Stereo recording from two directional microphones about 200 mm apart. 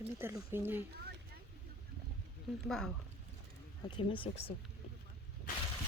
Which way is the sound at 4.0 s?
25° left (ahead or behind).